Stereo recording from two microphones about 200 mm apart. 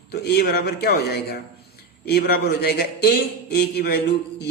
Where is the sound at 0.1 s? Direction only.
55° left (ahead or behind).